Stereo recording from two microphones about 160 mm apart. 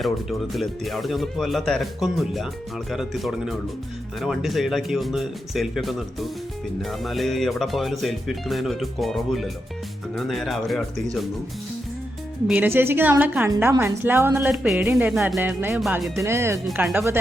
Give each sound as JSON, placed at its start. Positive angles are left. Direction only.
{"t": 0.0, "sound": "speech", "side_deg": 0}
{"t": 12.5, "sound": "a woman's voice", "side_deg": -10}
{"t": 14.5, "sound": "a woman's voice", "side_deg": -5}
{"t": 15.8, "sound": "speech", "side_deg": 0}
{"t": 16.1, "sound": "a woman's voice", "side_deg": -15}